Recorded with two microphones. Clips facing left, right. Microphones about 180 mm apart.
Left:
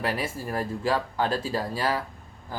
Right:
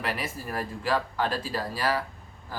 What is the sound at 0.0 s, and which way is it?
Speech, 30° left (ahead or behind).